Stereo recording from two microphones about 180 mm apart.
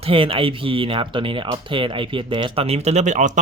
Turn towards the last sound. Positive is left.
turn(degrees=-40)  # may be behind; listen again after turning